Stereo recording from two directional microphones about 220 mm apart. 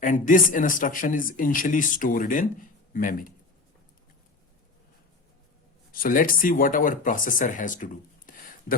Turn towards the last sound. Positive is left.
turn(degrees=35)  # may be behind; listen again after turning